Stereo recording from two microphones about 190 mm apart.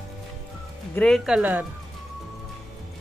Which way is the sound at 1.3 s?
10° right (ahead or behind).